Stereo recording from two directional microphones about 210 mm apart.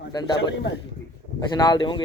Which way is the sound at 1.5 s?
20° left (ahead or behind).